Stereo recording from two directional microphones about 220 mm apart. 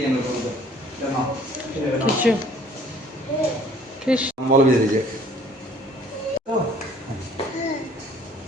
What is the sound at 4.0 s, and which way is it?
Speech, 5° right (ahead or behind).